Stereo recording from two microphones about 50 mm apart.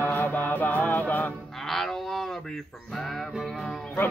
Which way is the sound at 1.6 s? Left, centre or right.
Centre.